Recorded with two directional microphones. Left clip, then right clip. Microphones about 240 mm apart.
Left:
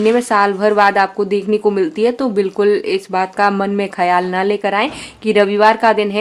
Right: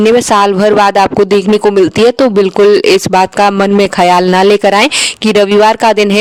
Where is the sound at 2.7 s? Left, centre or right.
Right.